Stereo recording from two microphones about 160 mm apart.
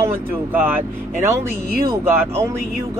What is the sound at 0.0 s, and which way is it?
Speech, 15° right (ahead or behind).